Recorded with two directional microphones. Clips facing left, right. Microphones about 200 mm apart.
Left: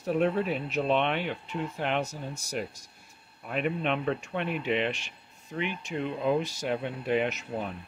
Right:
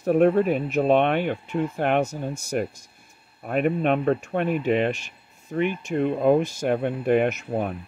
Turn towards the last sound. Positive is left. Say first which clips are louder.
# right 7 dB
turn(degrees=-55)  # may be behind; listen again after turning